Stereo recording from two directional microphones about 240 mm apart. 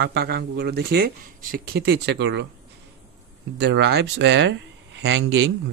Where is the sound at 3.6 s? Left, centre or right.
Right.